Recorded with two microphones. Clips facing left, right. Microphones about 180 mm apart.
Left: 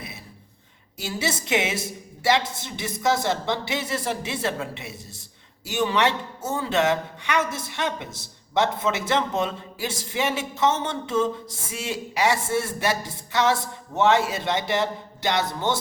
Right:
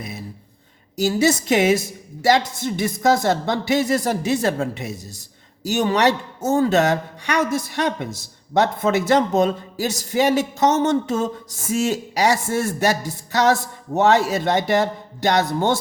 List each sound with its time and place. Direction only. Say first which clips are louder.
1.0 s speech: right 10 dB; 45° right (ahead or behind)